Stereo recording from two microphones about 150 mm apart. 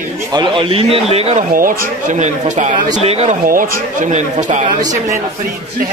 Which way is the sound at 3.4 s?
65° right (ahead or behind).